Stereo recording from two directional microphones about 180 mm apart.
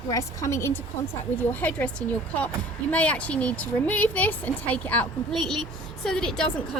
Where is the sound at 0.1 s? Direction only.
15° left (ahead or behind).